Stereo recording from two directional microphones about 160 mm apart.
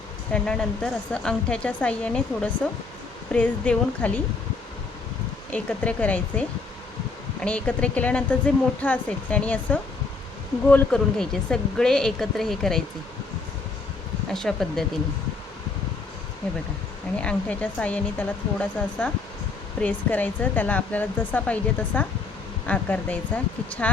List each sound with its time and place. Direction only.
0.3 s speech: 5° left (ahead or behind)
5.5 s speech: 10° left (ahead or behind)
7.4 s speech: 5° left (ahead or behind)
14.3 s speech: 5° left (ahead or behind)
17.2 s speech: 10° left (ahead or behind)